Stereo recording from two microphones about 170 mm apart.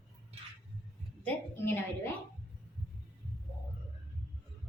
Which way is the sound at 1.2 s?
10° left (ahead or behind).